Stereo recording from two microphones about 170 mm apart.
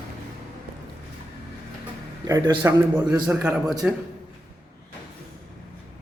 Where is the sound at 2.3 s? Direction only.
20° right (ahead or behind).